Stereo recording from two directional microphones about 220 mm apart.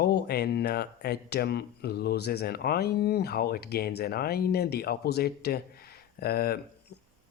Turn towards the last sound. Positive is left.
turn(degrees=45)  # may be behind; listen again after turning